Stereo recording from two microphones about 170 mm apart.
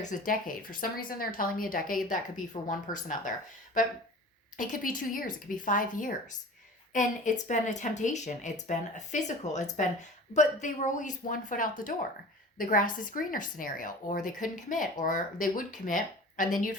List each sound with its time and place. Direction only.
0.3 s speech: 55° left (ahead or behind)
4.5 s speech: 50° left (ahead or behind)